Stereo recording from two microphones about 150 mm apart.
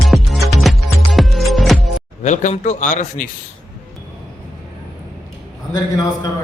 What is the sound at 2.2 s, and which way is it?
Speech, 50° left (ahead or behind).